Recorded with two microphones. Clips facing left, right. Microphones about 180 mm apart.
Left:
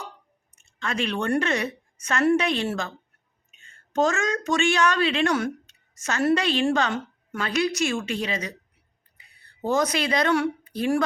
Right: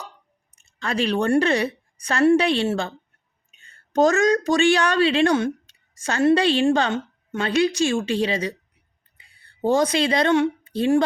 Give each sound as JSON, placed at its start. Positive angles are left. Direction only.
{"t": 0.5, "sound": "a woman's voice", "side_deg": -35}